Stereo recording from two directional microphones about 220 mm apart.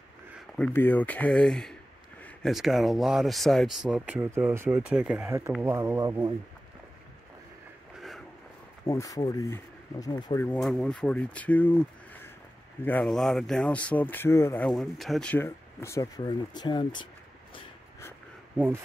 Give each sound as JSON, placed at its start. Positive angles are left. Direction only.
{"t": 0.6, "sound": "speech", "side_deg": 10}
{"t": 8.8, "sound": "speech", "side_deg": 15}
{"t": 10.4, "sound": "speech", "side_deg": 5}